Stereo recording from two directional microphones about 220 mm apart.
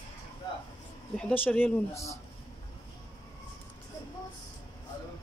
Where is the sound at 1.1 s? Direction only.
5° left (ahead or behind).